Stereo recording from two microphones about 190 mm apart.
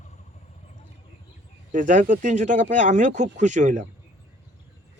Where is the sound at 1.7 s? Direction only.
40° right (ahead or behind).